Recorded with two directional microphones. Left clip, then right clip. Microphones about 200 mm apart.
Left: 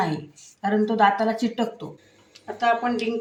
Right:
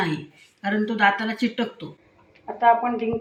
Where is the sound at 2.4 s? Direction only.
35° left (ahead or behind).